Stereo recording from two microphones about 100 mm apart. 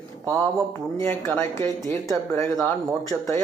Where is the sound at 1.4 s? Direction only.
30° left (ahead or behind).